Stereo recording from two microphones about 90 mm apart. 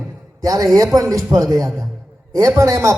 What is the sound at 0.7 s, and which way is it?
Speech, 35° right (ahead or behind).